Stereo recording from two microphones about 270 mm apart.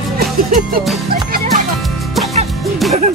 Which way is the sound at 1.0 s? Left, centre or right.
Right.